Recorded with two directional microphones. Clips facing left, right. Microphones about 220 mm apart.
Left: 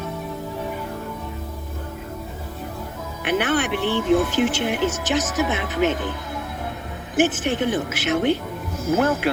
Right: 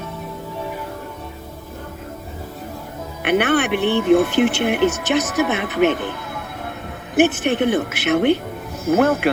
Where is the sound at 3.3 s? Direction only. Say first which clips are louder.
Right 4 dB; 65° right (ahead or behind).